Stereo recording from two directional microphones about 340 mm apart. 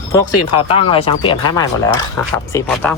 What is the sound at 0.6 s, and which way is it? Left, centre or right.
Speech, centre.